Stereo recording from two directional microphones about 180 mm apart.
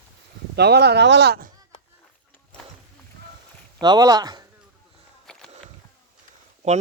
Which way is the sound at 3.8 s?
20° right (ahead or behind).